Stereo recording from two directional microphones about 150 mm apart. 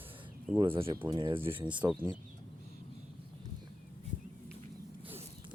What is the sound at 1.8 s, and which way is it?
Speech, 15° right (ahead or behind).